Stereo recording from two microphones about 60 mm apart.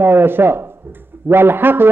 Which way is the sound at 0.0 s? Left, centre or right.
Right.